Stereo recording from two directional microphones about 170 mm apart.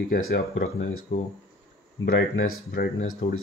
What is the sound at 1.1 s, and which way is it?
Speech, 65° left (ahead or behind).